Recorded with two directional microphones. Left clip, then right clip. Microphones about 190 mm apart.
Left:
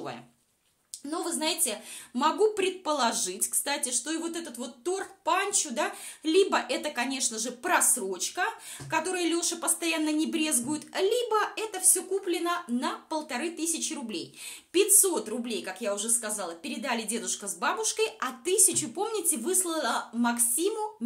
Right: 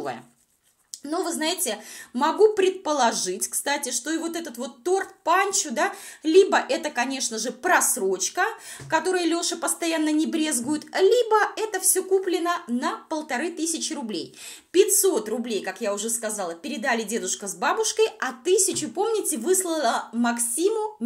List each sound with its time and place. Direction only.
1.1 s a woman's voice: 25° right (ahead or behind)